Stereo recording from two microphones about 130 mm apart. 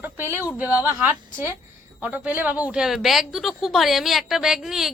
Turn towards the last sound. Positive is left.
turn(degrees=0)  # may be behind; listen again after turning